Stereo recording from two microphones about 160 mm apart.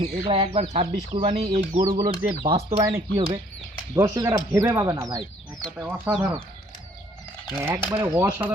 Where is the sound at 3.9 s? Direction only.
20° right (ahead or behind).